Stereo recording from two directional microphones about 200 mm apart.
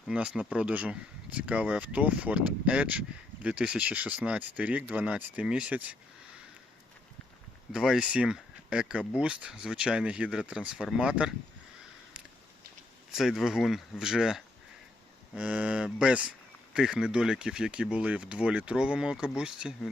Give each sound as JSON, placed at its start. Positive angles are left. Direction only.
{"t": 0.1, "sound": "speech", "side_deg": -5}
{"t": 7.7, "sound": "speech", "side_deg": -5}
{"t": 13.1, "sound": "speech", "side_deg": 0}